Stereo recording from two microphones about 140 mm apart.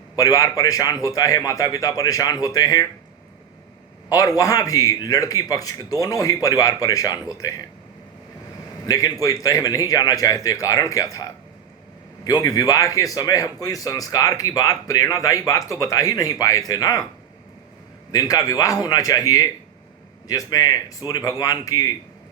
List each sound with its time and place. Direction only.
0.2 s speech: 25° left (ahead or behind)
4.1 s speech: 25° left (ahead or behind)
8.9 s speech: 25° left (ahead or behind)
18.1 s speech: 25° left (ahead or behind)